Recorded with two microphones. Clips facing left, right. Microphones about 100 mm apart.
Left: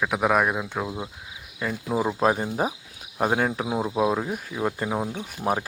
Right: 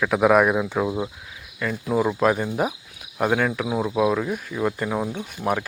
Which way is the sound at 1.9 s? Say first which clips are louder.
Right 2 dB; 20° left (ahead or behind).